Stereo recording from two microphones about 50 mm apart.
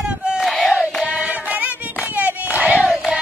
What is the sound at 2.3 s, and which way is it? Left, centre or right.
Crowd, right.